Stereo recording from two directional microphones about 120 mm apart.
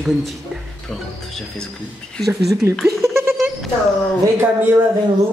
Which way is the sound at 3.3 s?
Centre (ahead or behind).